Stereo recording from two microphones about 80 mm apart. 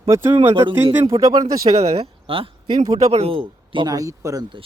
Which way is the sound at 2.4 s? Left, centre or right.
Right.